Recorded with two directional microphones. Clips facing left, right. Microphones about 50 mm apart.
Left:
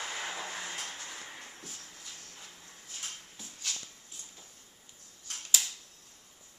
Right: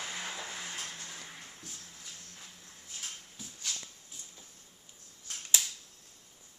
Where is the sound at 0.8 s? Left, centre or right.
Left.